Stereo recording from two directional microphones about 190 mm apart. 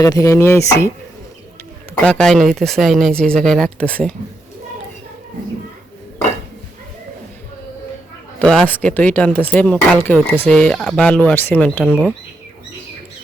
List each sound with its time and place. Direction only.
0.0 s speech: 15° left (ahead or behind)
2.0 s speech: 5° left (ahead or behind)
8.4 s speech: 5° left (ahead or behind)